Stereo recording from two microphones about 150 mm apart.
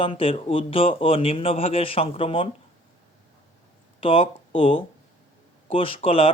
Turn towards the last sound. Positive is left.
turn(degrees=40)  # may be behind; listen again after turning